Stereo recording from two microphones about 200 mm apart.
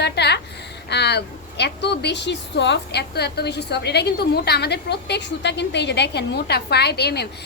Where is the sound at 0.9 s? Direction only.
55° left (ahead or behind).